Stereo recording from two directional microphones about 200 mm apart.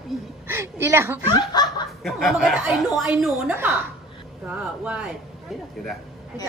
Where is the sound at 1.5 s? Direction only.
20° left (ahead or behind).